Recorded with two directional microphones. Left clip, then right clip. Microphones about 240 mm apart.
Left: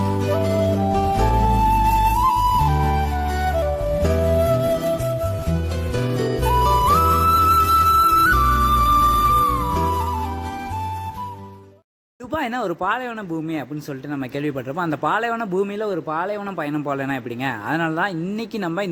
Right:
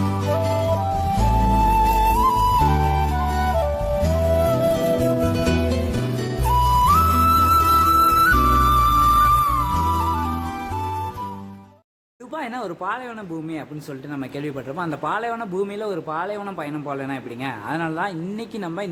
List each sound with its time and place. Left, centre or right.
0.0 s music: centre
12.3 s a sound: left
14.2 s a man's voice: left